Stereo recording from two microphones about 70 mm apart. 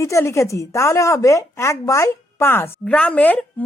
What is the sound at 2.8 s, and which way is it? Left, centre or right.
Speech, centre.